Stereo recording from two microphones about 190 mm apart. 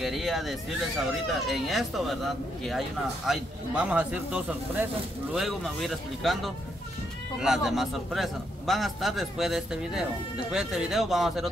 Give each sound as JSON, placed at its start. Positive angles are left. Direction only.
{"t": 0.0, "sound": "a man's voice", "side_deg": 0}
{"t": 3.3, "sound": "a man's voice", "side_deg": -5}